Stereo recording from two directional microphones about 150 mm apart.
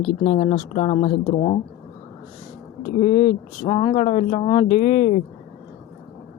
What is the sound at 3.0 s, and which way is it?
Speech, 50° left (ahead or behind).